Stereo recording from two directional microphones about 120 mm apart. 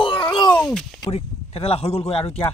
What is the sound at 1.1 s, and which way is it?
Speech, 55° left (ahead or behind).